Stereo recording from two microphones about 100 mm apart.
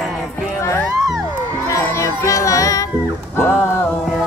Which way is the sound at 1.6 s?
30° left (ahead or behind).